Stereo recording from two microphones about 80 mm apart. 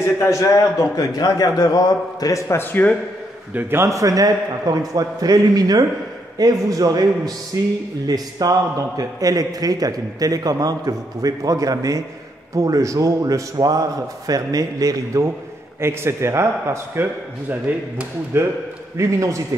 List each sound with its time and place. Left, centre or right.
0.0 s a man's voice: left
3.5 s a man's voice: right
3.9 s a man's voice: right
15.8 s a man's voice: right
18.9 s a man's voice: right